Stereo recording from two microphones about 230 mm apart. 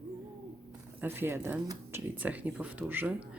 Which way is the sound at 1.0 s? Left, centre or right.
Centre.